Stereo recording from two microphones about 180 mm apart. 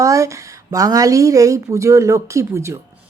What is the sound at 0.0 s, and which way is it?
Speech, 15° right (ahead or behind).